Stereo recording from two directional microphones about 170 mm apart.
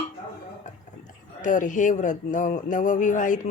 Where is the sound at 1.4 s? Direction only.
50° left (ahead or behind).